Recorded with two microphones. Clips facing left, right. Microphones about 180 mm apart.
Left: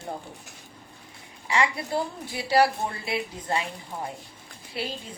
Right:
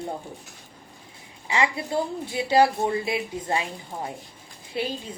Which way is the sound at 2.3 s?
20° right (ahead or behind).